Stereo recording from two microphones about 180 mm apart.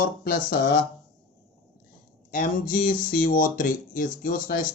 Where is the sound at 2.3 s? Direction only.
50° left (ahead or behind).